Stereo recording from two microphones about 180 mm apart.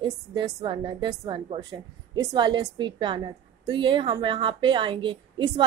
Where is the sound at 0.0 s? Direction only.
25° right (ahead or behind).